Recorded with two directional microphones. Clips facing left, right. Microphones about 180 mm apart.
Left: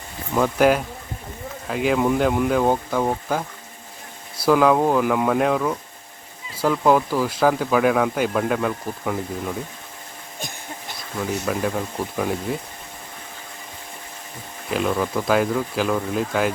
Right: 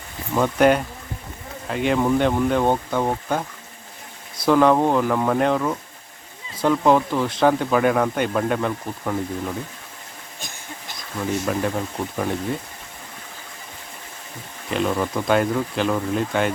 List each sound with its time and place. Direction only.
0.3 s speech: centre (ahead or behind)
4.4 s speech: 5° left (ahead or behind)
11.4 s speech: centre (ahead or behind)
14.7 s speech: centre (ahead or behind)